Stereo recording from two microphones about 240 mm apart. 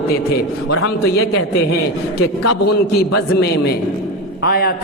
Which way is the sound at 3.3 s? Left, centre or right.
Left.